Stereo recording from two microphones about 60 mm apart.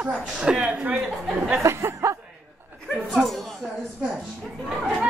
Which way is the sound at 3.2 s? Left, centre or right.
Centre.